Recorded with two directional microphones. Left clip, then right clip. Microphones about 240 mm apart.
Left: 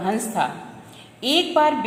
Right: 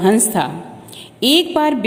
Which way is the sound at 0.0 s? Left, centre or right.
Right.